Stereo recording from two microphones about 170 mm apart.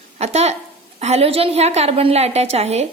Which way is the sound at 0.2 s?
40° right (ahead or behind).